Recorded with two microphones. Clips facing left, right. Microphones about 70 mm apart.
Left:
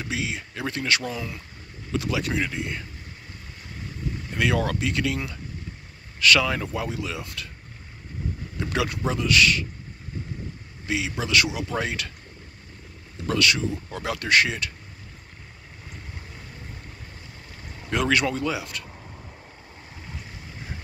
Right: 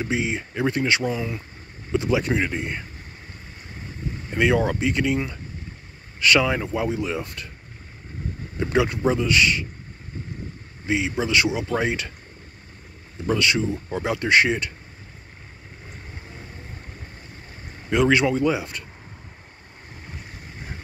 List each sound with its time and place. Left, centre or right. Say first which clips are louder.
0.0 s speech: right 5 dB; right
4.3 s speech: right 4 dB; right
8.5 s speech: right 6 dB; right
10.9 s speech: right 3 dB; right
13.3 s speech: right 2 dB; right
17.8 s speech: right 4 dB; centre